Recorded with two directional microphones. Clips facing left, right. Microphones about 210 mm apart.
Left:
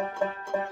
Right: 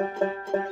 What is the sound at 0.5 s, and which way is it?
Music, 25° right (ahead or behind).